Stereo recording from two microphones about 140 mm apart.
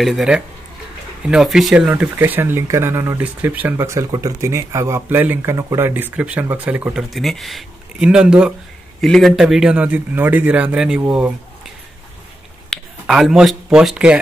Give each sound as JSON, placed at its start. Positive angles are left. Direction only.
{"t": 0.0, "sound": "speech", "side_deg": -5}
{"t": 2.1, "sound": "speech", "side_deg": -15}
{"t": 12.6, "sound": "speech", "side_deg": 0}